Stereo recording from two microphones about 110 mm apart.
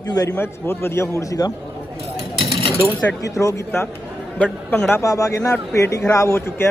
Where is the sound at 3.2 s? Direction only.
30° left (ahead or behind).